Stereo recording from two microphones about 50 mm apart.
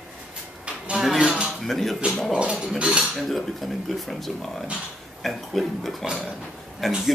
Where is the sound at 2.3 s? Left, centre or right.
Right.